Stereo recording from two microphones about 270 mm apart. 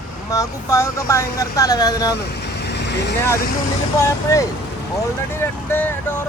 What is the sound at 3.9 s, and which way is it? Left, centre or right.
Speech, centre.